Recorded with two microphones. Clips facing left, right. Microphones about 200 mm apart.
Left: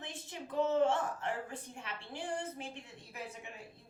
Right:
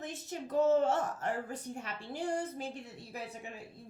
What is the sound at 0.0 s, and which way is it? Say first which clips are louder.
A woman's voice: right 5 dB; 40° right (ahead or behind).